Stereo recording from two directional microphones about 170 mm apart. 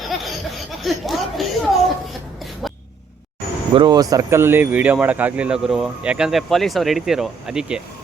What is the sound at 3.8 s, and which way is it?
Speech, 25° right (ahead or behind).